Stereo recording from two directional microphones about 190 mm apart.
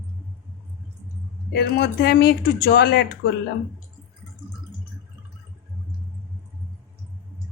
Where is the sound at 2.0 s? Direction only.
55° left (ahead or behind).